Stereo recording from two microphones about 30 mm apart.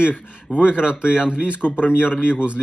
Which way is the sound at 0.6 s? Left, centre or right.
Right.